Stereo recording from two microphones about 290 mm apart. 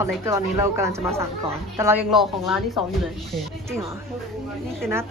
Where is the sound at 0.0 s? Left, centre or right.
Centre.